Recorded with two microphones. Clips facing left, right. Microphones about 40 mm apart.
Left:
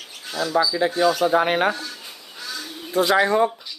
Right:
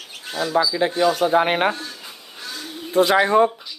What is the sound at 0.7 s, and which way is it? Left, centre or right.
Speech, right.